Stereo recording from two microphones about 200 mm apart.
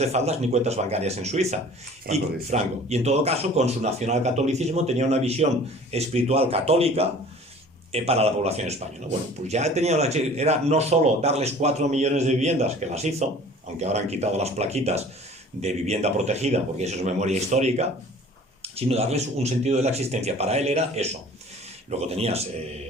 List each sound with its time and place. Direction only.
0.0 s speech: 30° right (ahead or behind)